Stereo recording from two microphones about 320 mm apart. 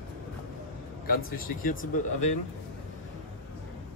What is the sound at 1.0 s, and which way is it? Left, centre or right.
Speech, left.